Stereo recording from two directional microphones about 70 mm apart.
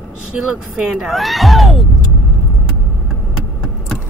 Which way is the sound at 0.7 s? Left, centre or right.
Centre.